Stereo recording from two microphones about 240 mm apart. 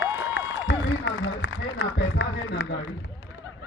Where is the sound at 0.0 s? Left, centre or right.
Left.